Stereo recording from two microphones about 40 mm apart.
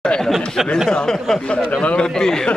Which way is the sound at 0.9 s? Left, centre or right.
Centre.